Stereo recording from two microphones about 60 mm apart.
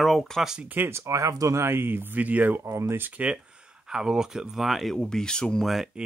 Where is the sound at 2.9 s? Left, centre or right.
Right.